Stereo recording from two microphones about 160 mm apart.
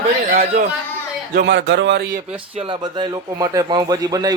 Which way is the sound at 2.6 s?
30° right (ahead or behind).